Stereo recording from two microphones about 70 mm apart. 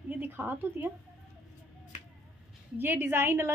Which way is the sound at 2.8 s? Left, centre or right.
Right.